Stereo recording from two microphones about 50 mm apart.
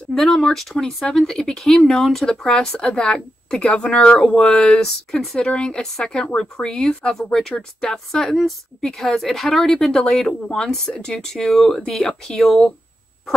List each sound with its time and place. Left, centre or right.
0.1 s a woman's voice: centre
2.2 s a woman's voice: centre
5.5 s a woman's voice: left